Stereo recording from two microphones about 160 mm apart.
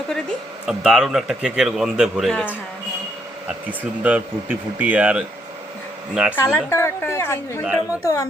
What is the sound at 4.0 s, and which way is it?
A man's voice, 10° right (ahead or behind).